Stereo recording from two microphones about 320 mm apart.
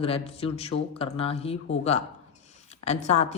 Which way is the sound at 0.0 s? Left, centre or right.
Centre.